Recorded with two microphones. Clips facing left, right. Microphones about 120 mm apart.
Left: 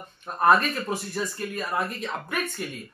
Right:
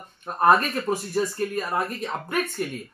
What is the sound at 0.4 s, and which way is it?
Speech, 40° right (ahead or behind).